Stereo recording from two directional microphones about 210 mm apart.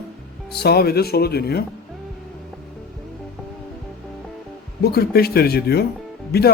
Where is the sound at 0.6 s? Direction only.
50° left (ahead or behind).